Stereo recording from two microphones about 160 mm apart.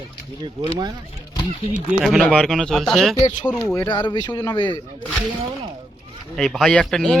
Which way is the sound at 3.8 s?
25° left (ahead or behind).